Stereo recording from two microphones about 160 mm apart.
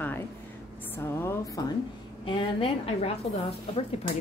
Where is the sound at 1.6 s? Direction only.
25° left (ahead or behind).